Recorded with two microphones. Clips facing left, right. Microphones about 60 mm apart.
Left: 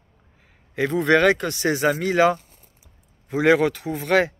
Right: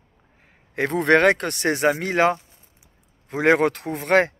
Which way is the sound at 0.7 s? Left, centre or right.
Right.